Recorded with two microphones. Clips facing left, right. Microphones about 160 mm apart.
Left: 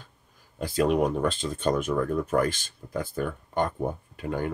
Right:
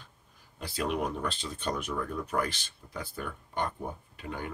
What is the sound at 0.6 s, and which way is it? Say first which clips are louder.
Speech: left 8 dB; 45° left (ahead or behind).